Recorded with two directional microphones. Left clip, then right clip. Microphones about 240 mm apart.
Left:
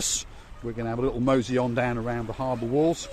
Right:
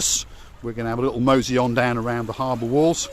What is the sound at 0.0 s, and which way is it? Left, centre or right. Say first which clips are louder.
Speech: right 6 dB; centre.